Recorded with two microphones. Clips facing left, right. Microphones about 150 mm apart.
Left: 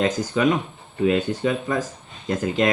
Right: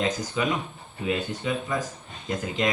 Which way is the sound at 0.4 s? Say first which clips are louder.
Left 7 dB; 55° left (ahead or behind).